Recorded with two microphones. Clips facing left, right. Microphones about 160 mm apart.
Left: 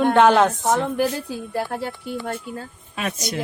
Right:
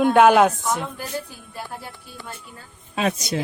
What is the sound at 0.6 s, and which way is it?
Speech, 80° left.